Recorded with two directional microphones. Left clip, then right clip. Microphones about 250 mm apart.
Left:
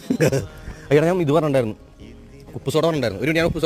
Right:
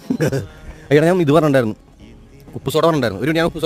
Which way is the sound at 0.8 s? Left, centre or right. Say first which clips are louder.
Right 4 dB; right.